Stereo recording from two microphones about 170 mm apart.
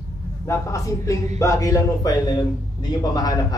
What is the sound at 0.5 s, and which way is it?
A man's voice, 20° left (ahead or behind).